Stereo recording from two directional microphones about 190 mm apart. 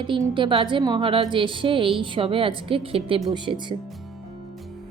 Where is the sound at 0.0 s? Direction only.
25° right (ahead or behind).